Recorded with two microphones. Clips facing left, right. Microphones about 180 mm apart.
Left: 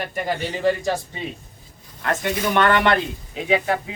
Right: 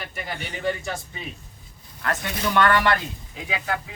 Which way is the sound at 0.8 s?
35° left (ahead or behind).